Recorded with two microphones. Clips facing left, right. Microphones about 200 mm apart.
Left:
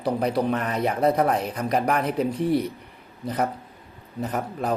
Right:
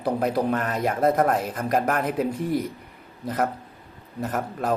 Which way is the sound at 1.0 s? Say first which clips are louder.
Right 1 dB; 50° right (ahead or behind).